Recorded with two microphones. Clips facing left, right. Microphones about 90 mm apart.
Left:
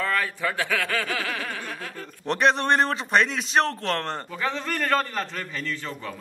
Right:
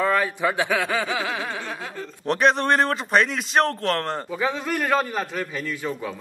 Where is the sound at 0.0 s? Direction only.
20° right (ahead or behind).